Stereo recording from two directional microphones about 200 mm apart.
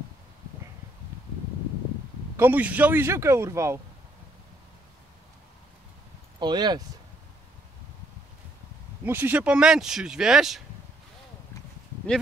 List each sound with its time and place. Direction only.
2.3 s speech: 10° right (ahead or behind)
6.4 s speech: 20° right (ahead or behind)
9.0 s speech: 10° right (ahead or behind)